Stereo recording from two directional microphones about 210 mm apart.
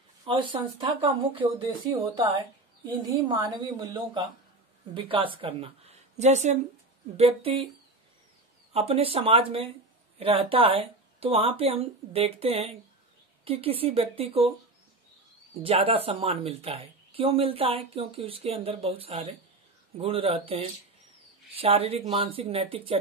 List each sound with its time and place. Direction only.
0.2 s speech: 25° right (ahead or behind)
8.7 s speech: 30° right (ahead or behind)
15.6 s speech: 25° right (ahead or behind)